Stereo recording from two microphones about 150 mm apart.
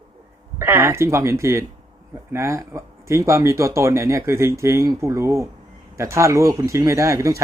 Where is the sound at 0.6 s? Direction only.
15° right (ahead or behind).